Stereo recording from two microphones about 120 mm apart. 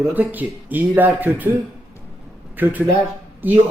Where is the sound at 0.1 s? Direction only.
15° right (ahead or behind).